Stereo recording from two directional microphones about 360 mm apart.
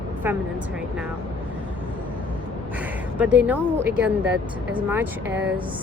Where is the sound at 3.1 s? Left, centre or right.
Centre.